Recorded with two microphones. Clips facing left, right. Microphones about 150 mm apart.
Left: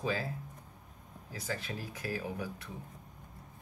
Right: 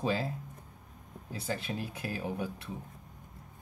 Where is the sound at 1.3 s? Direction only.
25° right (ahead or behind).